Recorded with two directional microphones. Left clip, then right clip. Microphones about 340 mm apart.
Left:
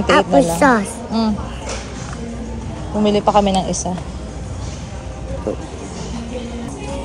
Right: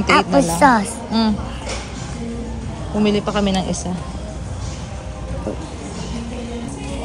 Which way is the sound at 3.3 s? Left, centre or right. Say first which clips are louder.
Left 6 dB; centre.